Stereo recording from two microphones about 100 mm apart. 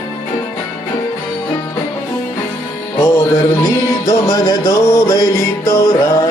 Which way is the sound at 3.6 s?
35° left (ahead or behind).